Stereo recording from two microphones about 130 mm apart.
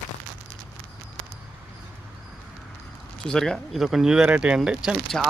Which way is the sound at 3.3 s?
5° left (ahead or behind).